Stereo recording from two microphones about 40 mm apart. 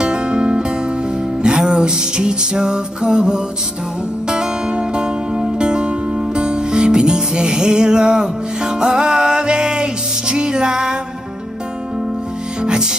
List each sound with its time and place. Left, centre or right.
0.0 s music: right